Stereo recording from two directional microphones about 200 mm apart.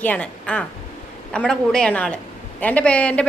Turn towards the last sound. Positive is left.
turn(degrees=5)  # may be behind; listen again after turning